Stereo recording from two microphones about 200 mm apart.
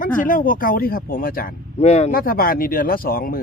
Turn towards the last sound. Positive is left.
turn(degrees=45)  # may be behind; listen again after turning